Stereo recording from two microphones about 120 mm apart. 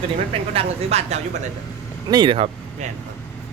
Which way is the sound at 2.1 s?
40° right (ahead or behind).